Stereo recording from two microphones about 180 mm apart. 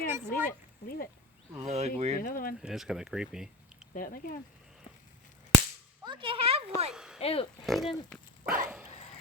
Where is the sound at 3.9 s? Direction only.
50° left (ahead or behind).